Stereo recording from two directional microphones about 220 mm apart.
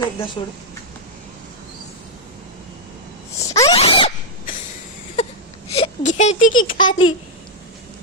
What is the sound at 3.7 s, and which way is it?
Zipper, 25° left (ahead or behind).